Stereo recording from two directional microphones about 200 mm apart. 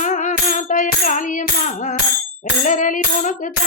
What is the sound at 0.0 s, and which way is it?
Music, 40° left (ahead or behind).